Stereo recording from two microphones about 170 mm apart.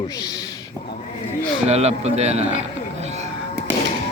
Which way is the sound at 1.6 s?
40° right (ahead or behind).